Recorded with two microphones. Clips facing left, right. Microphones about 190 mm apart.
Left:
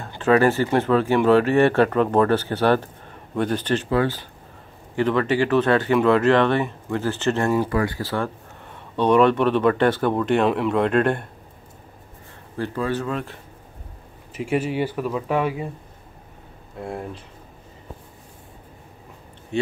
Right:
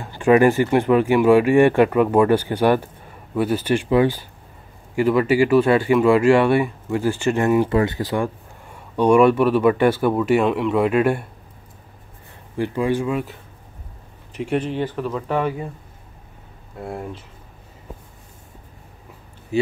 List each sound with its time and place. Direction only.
0.2 s speech: 15° right (ahead or behind)
12.5 s speech: 15° right (ahead or behind)
14.3 s speech: 5° left (ahead or behind)
16.8 s speech: centre (ahead or behind)
19.5 s a sound: 5° right (ahead or behind)